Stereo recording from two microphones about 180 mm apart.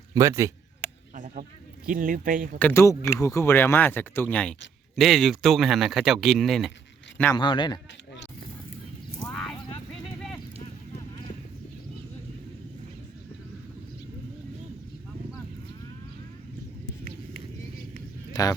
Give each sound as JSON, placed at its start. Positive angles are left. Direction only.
{"t": 0.1, "sound": "speech", "side_deg": -15}
{"t": 1.1, "sound": "a sound", "side_deg": -45}
{"t": 1.9, "sound": "speech", "side_deg": -50}
{"t": 2.6, "sound": "speech", "side_deg": 10}
{"t": 7.3, "sound": "a man's voice", "side_deg": 25}